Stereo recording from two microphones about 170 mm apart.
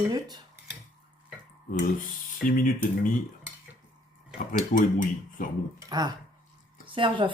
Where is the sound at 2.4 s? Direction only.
55° left (ahead or behind).